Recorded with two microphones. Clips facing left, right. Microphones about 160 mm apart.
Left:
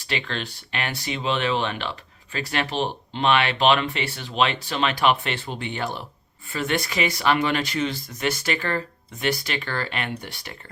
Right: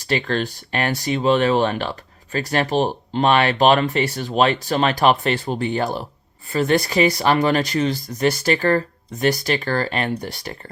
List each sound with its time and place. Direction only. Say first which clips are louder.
0.0 s speech: right 8 dB; 40° right (ahead or behind)